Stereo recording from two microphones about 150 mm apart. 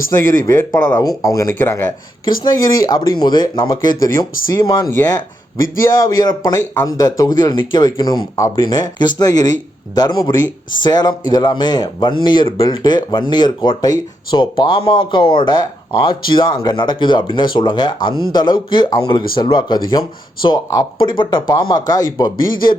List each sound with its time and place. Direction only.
0.1 s speech: 20° left (ahead or behind)
2.4 s speech: 25° left (ahead or behind)